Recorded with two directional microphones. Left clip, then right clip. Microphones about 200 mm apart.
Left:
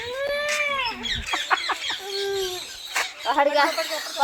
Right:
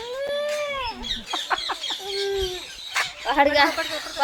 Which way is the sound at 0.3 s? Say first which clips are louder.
Left 2 dB; 10° left (ahead or behind).